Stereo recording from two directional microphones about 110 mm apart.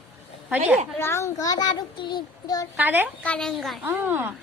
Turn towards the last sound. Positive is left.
turn(degrees=-20)  # may be behind; listen again after turning